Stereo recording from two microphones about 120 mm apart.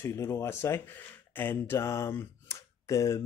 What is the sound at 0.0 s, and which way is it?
Speech, 25° left (ahead or behind).